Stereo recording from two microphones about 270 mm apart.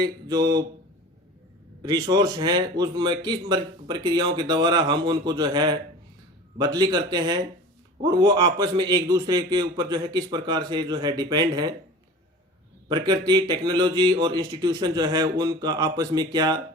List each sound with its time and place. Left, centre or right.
0.0 s a man's voice: centre
1.8 s a man's voice: centre
12.9 s a man's voice: centre